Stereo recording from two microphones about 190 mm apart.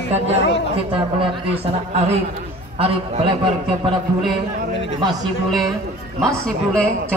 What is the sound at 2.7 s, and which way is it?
Speech, 30° right (ahead or behind).